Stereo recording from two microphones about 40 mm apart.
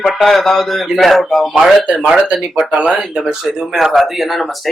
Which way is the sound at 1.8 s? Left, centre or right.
Right.